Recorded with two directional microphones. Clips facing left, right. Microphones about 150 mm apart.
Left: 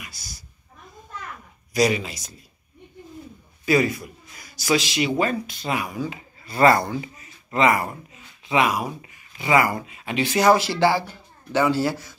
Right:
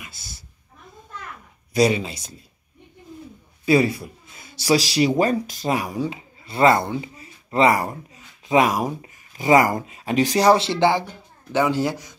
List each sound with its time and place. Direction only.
0.0 s a sound: 25° right (ahead or behind)
1.7 s speech: 30° right (ahead or behind)
3.6 s speech: 30° right (ahead or behind)
6.0 s speech: 25° right (ahead or behind)